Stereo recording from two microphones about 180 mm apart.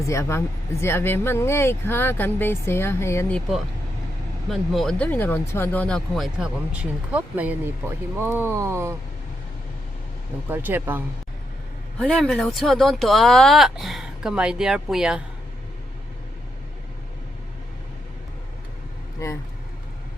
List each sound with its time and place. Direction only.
0.0 s speech: 15° left (ahead or behind); by 9.0 s 15° right (ahead or behind)
10.5 s speech: 10° right (ahead or behind)
11.9 s speech: centre (ahead or behind)
19.2 s speech: 15° left (ahead or behind)